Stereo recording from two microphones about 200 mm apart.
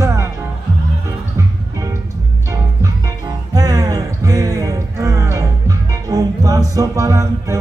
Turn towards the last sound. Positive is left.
turn(degrees=-15)  # may be behind; listen again after turning